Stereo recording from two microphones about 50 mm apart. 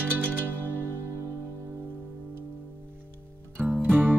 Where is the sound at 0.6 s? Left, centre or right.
Left.